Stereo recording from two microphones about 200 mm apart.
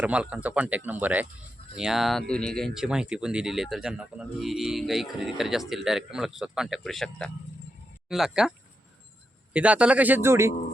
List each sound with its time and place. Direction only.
0.0 s speech: 5° right (ahead or behind)